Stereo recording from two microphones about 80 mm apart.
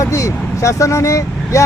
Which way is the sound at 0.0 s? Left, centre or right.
Left.